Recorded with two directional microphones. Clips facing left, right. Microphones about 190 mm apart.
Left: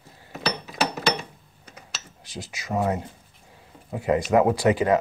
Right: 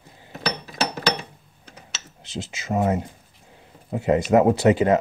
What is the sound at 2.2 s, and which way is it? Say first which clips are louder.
Speech: right 6 dB; 25° right (ahead or behind).